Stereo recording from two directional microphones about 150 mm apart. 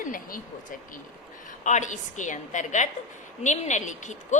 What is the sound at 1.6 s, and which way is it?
A woman's voice, 55° left (ahead or behind).